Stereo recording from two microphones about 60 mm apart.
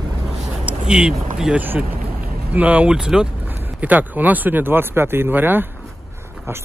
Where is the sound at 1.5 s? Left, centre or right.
Right; by 3.2 s centre.